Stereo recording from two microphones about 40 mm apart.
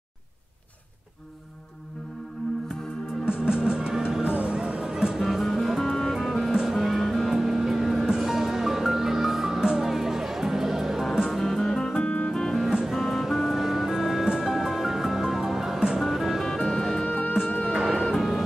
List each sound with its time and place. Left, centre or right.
3.3 s music: right
5.2 s music: centre
12.6 s music: centre
13.0 s music: centre
16.5 s music: centre
16.9 s music: centre